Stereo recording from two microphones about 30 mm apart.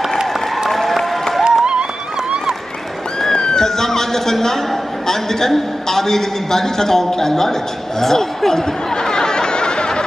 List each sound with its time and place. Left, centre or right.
0.7 s applause: centre
1.4 s music: right
3.3 s a man's voice: left
8.9 s a sound: left